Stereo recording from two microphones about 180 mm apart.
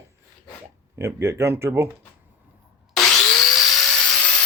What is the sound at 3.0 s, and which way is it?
Wood, centre (ahead or behind).